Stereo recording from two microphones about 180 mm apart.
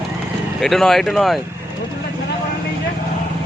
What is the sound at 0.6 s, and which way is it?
Speech, centre (ahead or behind).